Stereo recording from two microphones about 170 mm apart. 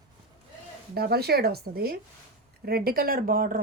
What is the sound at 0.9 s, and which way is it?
A woman's voice, 65° right (ahead or behind).